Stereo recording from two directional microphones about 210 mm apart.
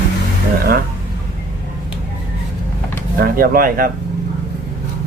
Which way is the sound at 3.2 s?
45° right (ahead or behind).